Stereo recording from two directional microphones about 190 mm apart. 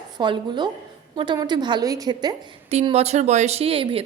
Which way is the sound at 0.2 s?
25° right (ahead or behind).